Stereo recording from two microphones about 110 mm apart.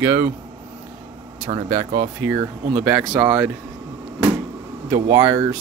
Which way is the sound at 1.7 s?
25° right (ahead or behind).